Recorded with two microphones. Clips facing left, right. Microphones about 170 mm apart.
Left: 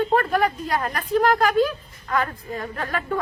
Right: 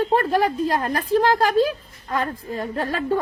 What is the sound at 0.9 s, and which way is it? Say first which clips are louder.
Speech: even; 35° right (ahead or behind).